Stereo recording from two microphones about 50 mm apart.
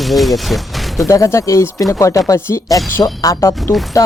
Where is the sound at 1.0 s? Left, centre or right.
Left.